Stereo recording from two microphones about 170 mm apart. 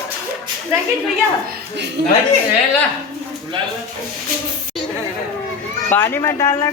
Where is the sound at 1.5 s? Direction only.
90° right.